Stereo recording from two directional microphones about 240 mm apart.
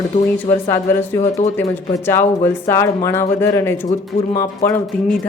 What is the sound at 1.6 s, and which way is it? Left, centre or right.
Speech, centre.